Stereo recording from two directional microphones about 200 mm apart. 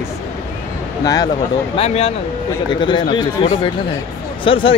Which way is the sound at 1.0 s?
20° left (ahead or behind).